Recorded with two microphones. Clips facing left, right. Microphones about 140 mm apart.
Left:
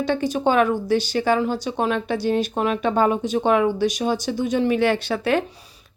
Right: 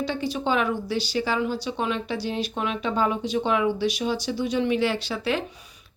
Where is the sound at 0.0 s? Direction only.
50° left (ahead or behind).